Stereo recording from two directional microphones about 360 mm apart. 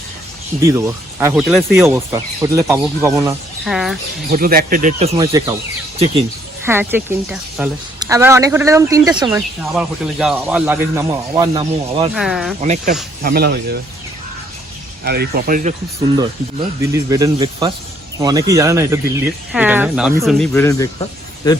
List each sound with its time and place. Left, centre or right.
1.2 s speech: centre
4.3 s speech: right
6.7 s speech: centre
12.1 s speech: centre
12.5 s speech: centre
15.0 s speech: right
16.1 s speech: centre